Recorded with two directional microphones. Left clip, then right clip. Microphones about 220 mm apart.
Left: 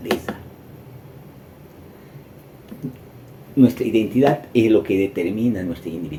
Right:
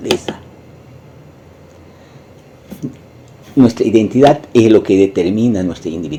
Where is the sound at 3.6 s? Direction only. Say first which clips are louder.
Right 6 dB; 30° right (ahead or behind).